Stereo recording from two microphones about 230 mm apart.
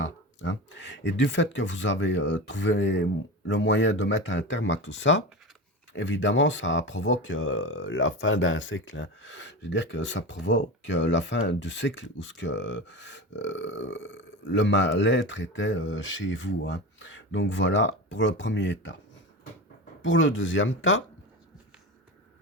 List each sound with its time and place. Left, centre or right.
0.0 s speech: left
20.0 s speech: left